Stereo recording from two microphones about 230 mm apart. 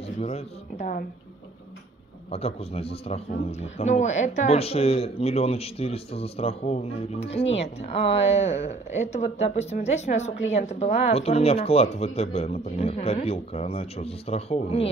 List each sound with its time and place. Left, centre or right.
0.2 s speech: left
2.3 s speech: left